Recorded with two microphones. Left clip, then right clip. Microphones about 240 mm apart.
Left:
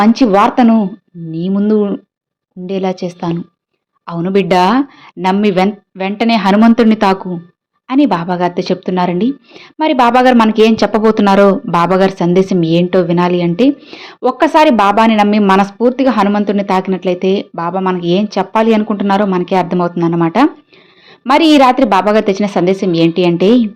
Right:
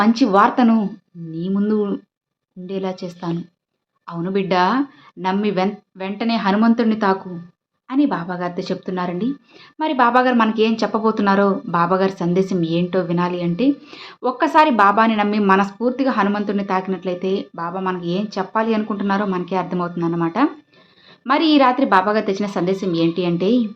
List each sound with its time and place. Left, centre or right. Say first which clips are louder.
0.0 s a woman's voice: left 5 dB; left